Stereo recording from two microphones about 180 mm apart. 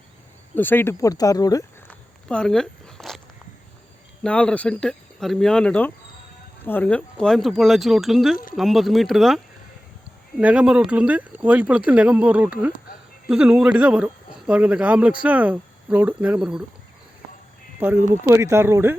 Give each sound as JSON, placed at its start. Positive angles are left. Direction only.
{"t": 0.5, "sound": "speech", "side_deg": 10}
{"t": 1.9, "sound": "walk", "side_deg": 5}
{"t": 4.2, "sound": "speech", "side_deg": 5}
{"t": 18.1, "sound": "speech", "side_deg": -15}